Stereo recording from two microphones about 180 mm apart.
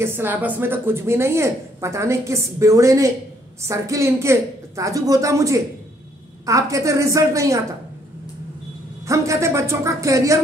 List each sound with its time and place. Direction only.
0.0 s a woman's voice: 10° right (ahead or behind)
9.0 s a woman's voice: 15° right (ahead or behind)